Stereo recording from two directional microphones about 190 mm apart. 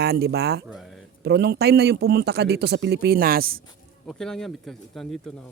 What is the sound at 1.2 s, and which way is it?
A man's voice, 60° right (ahead or behind).